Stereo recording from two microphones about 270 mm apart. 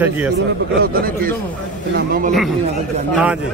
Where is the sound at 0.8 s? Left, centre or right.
Right.